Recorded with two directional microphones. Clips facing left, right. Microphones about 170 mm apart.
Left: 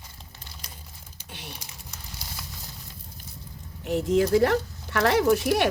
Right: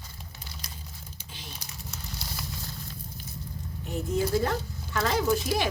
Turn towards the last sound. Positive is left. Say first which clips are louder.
# left 5 dB
turn(degrees=65)  # may be behind; listen again after turning